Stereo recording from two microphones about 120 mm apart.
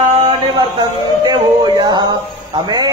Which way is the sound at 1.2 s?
35° right (ahead or behind).